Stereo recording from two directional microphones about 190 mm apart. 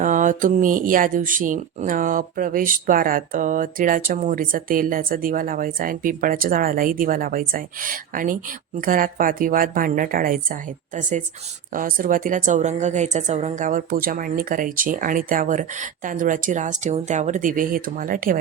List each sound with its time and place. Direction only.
0.0 s speech: 40° right (ahead or behind)